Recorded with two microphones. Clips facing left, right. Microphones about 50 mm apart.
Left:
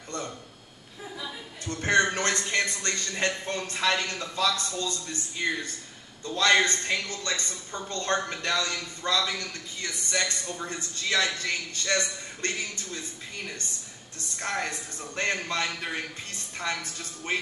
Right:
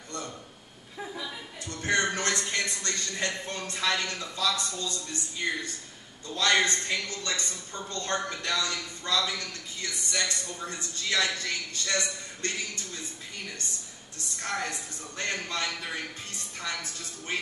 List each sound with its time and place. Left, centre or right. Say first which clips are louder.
1.7 s a sound: left 4 dB; left
4.2 s a man's voice: left 2 dB; left
14.4 s a man's voice: left 2 dB; left